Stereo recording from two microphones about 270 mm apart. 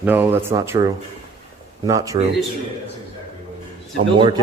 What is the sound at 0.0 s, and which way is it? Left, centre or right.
Speech, centre.